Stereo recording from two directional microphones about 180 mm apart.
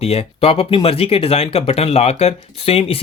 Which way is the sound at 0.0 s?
35° left (ahead or behind).